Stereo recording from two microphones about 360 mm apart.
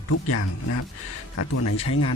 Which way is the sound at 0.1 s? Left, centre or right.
Left.